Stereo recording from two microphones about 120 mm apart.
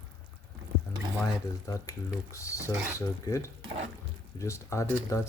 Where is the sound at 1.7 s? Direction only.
25° left (ahead or behind).